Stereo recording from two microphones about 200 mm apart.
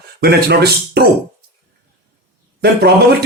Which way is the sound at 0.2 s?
50° right (ahead or behind).